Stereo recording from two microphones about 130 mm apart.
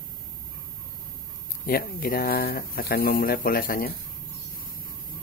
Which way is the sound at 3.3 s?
90° left.